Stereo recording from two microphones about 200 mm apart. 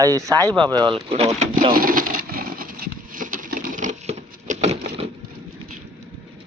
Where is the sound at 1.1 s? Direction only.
30° right (ahead or behind).